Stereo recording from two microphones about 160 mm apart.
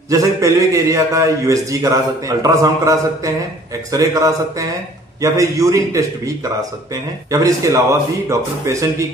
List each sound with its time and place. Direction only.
0.1 s a man's voice: 20° right (ahead or behind)